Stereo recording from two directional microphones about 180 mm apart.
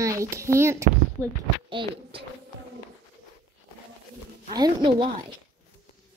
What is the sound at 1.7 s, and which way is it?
Speech, 25° right (ahead or behind).